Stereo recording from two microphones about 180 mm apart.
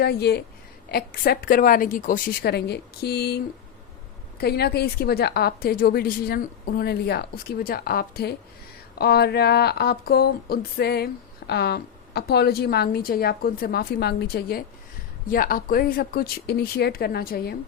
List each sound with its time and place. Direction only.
0.0 s speech: 65° left (ahead or behind)